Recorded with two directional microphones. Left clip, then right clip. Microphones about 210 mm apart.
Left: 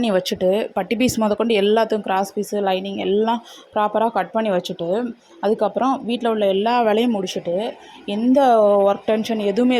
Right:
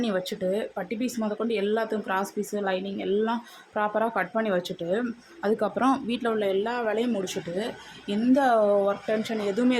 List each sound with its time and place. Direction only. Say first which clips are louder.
0.0 s speech: left 9 dB; 35° left (ahead or behind)
8.1 s speech: left 7 dB; 25° left (ahead or behind)